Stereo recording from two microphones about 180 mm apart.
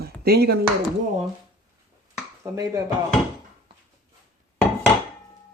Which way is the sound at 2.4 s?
20° right (ahead or behind).